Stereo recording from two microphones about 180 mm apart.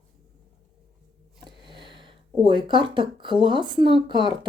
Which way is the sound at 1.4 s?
25° right (ahead or behind).